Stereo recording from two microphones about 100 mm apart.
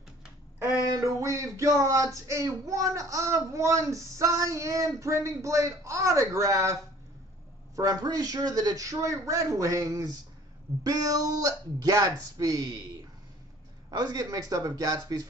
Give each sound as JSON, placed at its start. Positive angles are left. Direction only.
{"t": 0.9, "sound": "speech", "side_deg": -35}